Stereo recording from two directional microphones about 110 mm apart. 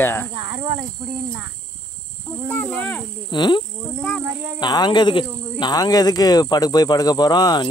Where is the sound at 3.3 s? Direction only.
45° left (ahead or behind).